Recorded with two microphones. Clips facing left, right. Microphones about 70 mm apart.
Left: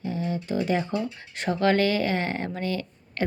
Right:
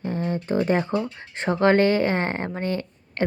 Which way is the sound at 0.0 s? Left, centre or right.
Right.